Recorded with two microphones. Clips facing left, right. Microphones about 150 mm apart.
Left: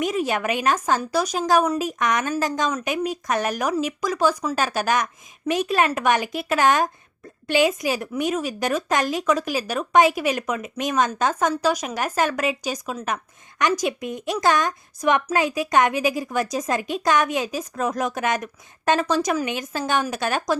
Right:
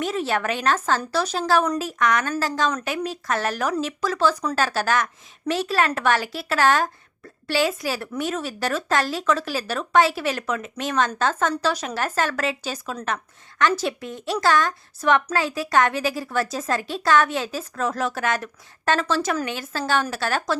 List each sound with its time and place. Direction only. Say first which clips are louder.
0.0 s speech: left 1 dB; 15° left (ahead or behind)